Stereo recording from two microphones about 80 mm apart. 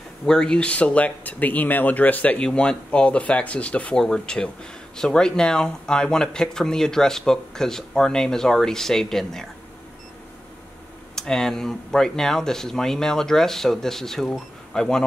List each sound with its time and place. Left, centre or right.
0.2 s speech: centre
11.1 s speech: centre